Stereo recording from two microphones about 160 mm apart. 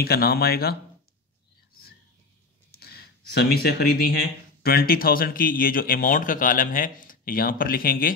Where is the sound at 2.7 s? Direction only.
75° left (ahead or behind).